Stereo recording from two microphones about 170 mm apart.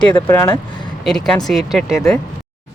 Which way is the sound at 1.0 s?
5° left (ahead or behind).